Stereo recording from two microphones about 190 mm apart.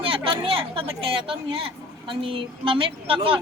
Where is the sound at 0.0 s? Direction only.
30° right (ahead or behind).